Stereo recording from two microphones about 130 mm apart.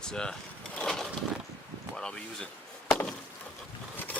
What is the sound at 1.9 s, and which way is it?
Speech, 5° left (ahead or behind).